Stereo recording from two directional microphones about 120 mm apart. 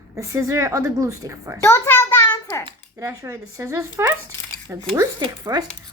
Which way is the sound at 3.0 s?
25° right (ahead or behind).